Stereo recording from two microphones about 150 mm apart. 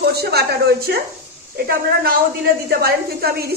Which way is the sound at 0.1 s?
90° right.